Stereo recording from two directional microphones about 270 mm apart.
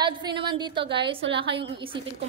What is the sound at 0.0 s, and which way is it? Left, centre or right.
Speech, centre.